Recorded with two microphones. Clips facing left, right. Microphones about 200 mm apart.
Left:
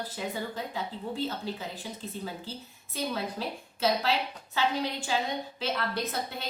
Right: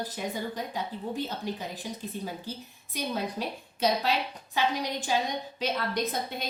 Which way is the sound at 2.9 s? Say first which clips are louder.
Right 1 dB; 15° right (ahead or behind).